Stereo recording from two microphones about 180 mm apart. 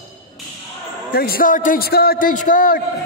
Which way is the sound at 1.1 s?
55° left (ahead or behind).